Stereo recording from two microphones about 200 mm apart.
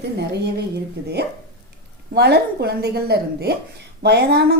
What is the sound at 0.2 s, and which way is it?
Speech, 55° right (ahead or behind).